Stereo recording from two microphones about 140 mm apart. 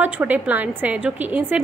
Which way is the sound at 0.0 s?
10° right (ahead or behind).